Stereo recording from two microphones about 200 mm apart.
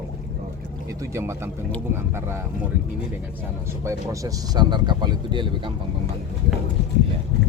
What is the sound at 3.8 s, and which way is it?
Speech, 15° right (ahead or behind).